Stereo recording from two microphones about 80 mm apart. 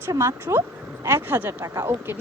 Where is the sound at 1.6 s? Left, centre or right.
Right.